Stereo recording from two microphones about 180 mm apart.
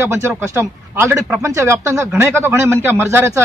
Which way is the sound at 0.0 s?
15° right (ahead or behind).